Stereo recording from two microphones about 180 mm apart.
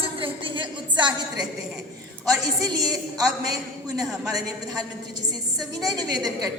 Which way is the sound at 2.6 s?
20° right (ahead or behind).